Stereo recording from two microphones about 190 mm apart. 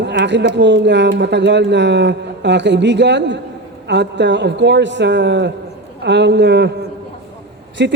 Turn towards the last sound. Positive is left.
turn(degrees=-65)  # may be behind; listen again after turning